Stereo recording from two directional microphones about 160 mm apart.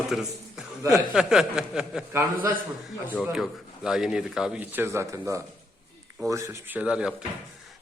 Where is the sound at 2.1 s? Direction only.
15° right (ahead or behind).